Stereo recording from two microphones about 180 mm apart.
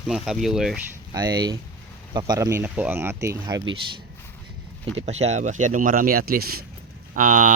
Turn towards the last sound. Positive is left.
turn(degrees=-50)  # may be behind; listen again after turning